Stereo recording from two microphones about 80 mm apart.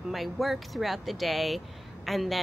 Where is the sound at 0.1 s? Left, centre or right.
Centre.